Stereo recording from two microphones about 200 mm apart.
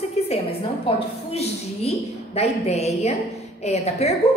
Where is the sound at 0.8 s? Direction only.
30° left (ahead or behind).